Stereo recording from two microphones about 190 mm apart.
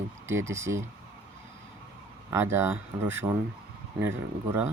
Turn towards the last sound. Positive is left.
turn(degrees=-10)  # may be behind; listen again after turning